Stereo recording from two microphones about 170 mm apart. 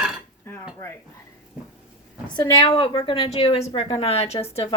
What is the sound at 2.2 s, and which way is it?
A woman's voice, 25° left (ahead or behind).